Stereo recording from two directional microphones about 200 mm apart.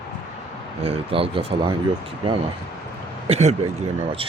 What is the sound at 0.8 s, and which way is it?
Speech, 30° right (ahead or behind).